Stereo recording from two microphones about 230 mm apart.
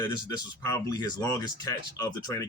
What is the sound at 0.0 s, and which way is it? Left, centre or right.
Speech, centre.